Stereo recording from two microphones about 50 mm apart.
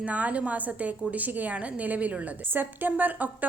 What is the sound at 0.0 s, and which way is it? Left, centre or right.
A woman's voice, right.